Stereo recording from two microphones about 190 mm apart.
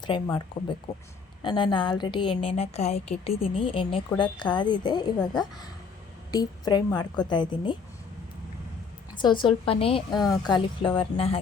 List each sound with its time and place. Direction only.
0.0 s speech: 25° left (ahead or behind)
9.1 s speech: 25° left (ahead or behind)